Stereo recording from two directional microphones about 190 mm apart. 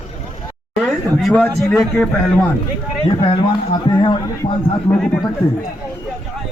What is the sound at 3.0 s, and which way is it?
Speech, 25° left (ahead or behind).